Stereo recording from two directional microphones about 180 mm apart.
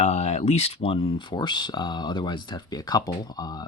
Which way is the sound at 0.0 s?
35° left (ahead or behind).